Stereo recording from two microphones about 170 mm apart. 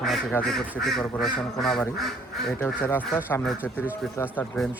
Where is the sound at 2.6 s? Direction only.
10° left (ahead or behind).